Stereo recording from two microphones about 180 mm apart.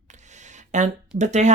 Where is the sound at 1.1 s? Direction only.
40° right (ahead or behind).